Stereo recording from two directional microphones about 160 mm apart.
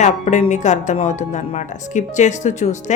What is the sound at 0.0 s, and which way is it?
A woman's voice, 50° left (ahead or behind).